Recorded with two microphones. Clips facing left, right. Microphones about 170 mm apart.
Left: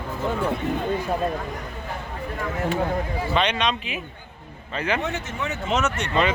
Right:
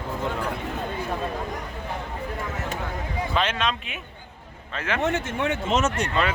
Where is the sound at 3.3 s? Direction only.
Centre (ahead or behind).